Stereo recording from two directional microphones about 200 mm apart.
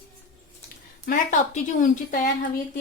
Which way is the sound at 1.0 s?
40° left (ahead or behind).